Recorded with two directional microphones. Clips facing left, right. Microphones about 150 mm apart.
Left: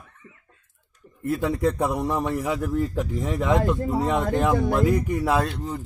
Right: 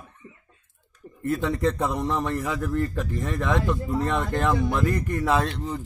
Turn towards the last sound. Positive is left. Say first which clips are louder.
# even
turn(degrees=5)  # may be behind; listen again after turning